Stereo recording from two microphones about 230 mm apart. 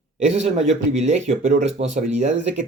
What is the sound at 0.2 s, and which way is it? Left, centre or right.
Speech, right.